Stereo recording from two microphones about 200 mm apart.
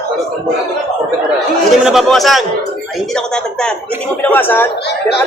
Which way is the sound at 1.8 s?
Centre (ahead or behind).